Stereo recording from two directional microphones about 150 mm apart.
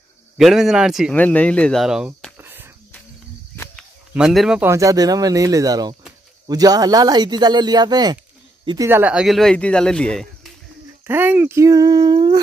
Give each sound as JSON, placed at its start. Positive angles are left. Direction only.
{"t": 0.4, "sound": "speech", "side_deg": -5}
{"t": 1.1, "sound": "speech", "side_deg": 10}
{"t": 2.3, "sound": "whispering", "side_deg": -15}
{"t": 4.1, "sound": "speech", "side_deg": -5}
{"t": 4.6, "sound": "speech", "side_deg": -20}
{"t": 11.1, "sound": "speech", "side_deg": -15}